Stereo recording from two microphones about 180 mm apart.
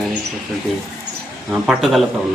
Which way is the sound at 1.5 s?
Centre (ahead or behind).